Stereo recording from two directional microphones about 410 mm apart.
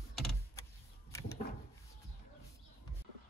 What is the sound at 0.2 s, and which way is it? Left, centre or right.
Power windows, centre.